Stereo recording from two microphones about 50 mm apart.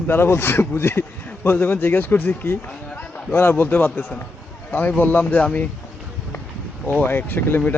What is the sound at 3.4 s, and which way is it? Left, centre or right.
Speech, left.